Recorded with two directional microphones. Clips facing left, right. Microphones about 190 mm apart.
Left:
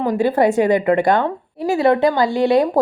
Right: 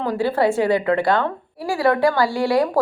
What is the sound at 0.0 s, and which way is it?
A woman's voice, 20° left (ahead or behind).